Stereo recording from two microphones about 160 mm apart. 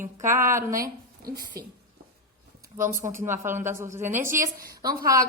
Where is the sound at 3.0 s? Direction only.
15° right (ahead or behind).